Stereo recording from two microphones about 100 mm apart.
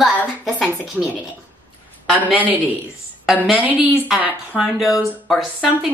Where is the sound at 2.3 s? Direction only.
15° right (ahead or behind).